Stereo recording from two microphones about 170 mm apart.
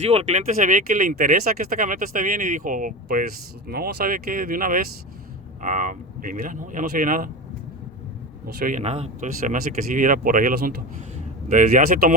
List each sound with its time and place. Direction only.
0.0 s speech: 35° right (ahead or behind); by 7.3 s 55° right (ahead or behind)
8.5 s speech: 55° right (ahead or behind)
8.8 s speech: 40° right (ahead or behind); by 12.1 s 60° right (ahead or behind)